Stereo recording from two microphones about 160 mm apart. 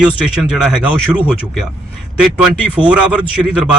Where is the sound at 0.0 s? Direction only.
5° right (ahead or behind).